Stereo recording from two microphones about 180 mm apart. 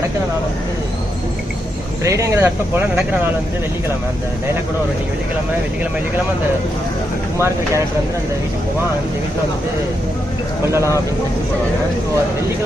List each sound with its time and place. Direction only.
2.0 s speech: 15° right (ahead or behind)